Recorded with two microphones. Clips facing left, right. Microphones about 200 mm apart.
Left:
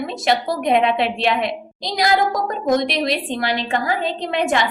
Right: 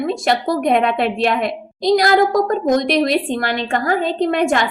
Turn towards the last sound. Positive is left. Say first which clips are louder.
# right 4 dB
turn(degrees=-50)  # may be behind; listen again after turning